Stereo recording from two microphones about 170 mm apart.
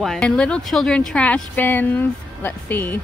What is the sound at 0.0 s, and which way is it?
A woman's voice, 5° left (ahead or behind).